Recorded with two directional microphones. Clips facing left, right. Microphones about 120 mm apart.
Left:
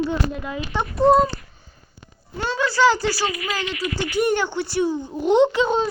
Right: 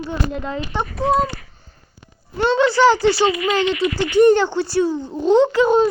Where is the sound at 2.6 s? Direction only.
20° right (ahead or behind).